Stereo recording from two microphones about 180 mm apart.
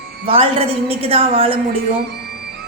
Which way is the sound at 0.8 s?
35° right (ahead or behind).